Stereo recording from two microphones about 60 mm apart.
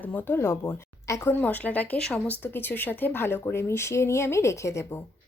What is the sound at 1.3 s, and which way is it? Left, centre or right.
Speech, left.